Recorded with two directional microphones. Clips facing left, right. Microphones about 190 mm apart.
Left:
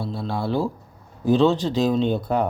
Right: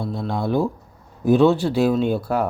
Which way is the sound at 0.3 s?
15° right (ahead or behind).